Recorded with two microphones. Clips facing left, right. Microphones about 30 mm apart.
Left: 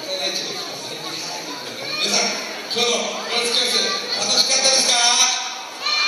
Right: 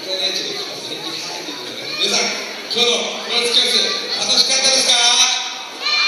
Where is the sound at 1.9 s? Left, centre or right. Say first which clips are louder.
Right 2 dB; centre.